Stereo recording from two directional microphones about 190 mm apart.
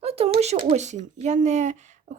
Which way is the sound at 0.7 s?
40° right (ahead or behind).